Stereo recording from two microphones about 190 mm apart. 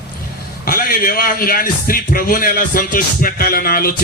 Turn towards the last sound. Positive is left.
turn(degrees=50)  # may be behind; listen again after turning